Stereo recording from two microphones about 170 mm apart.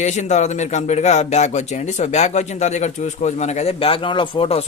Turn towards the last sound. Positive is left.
turn(degrees=35)  # may be behind; listen again after turning